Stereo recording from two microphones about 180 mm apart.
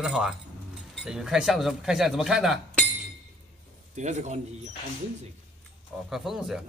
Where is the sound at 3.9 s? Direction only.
40° right (ahead or behind).